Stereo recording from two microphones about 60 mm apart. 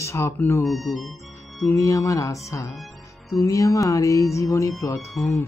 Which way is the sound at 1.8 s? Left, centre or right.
Left.